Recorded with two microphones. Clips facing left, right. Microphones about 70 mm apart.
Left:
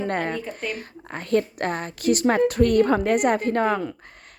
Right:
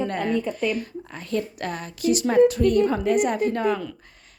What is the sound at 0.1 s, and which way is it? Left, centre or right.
A woman's voice, left.